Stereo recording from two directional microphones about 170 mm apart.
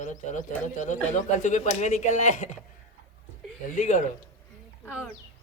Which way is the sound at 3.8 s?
45° left (ahead or behind).